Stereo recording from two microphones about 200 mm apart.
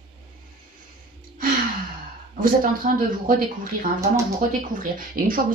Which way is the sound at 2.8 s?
40° right (ahead or behind).